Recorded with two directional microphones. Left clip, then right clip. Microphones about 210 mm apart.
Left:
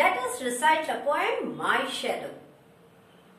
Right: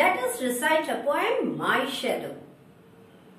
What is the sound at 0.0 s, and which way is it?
A woman's voice, centre (ahead or behind).